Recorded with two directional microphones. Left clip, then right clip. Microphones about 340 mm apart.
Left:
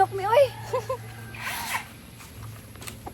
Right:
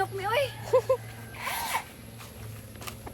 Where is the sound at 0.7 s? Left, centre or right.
Centre.